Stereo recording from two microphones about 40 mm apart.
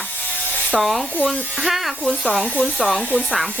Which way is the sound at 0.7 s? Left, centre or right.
Centre.